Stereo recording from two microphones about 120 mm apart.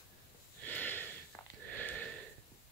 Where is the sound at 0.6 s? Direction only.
15° left (ahead or behind).